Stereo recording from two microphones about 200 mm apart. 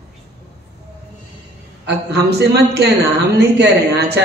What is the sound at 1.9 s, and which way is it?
Speech, 55° right (ahead or behind).